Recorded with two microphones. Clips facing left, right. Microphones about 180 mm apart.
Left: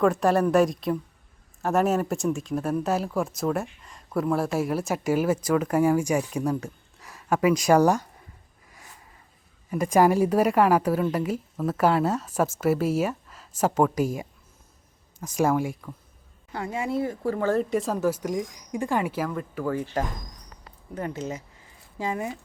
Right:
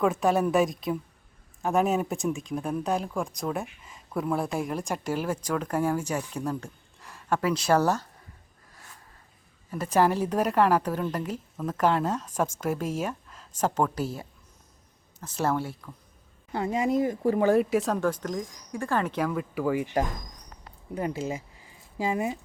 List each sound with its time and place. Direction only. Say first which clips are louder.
0.0 s speech: left 3 dB; centre (ahead or behind)
9.6 s a woman's voice: left 4 dB; 10° left (ahead or behind)
16.5 s a woman's voice: right 3 dB; 20° right (ahead or behind)
17.7 s a woman's voice: left 1 dB; centre (ahead or behind); by 22.4 s 20° right (ahead or behind)